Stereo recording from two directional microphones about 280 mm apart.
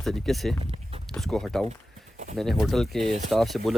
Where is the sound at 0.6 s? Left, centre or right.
Right.